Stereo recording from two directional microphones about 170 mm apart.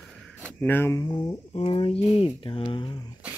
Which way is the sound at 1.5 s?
35° left (ahead or behind).